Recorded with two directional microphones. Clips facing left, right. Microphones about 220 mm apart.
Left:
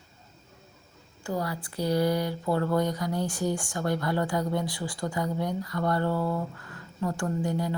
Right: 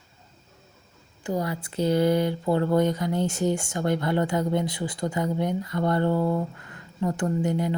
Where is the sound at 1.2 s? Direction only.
20° right (ahead or behind).